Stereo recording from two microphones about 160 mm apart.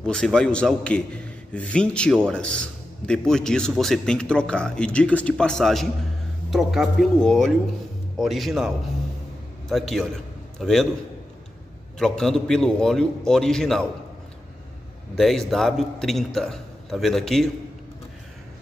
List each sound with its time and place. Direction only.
0.0 s a man's voice: 5° left (ahead or behind)
12.0 s a man's voice: 5° left (ahead or behind)
15.1 s a man's voice: centre (ahead or behind)